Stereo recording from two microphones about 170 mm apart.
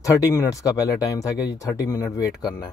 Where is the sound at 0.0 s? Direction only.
20° left (ahead or behind).